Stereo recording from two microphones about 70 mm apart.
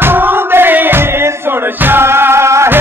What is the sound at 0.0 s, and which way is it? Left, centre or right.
Music, right.